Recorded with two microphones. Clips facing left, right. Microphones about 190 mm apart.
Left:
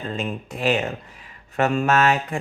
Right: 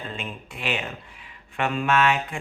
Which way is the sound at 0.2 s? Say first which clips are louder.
Left 8 dB; 40° left (ahead or behind).